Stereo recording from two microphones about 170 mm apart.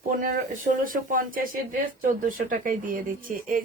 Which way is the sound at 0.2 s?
50° right (ahead or behind).